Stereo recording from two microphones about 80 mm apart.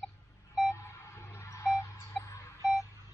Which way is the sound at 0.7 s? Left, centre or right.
Left.